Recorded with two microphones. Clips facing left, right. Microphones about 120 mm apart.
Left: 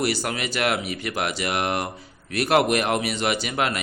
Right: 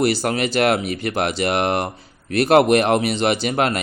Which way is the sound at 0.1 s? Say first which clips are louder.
Right 6 dB; 35° right (ahead or behind).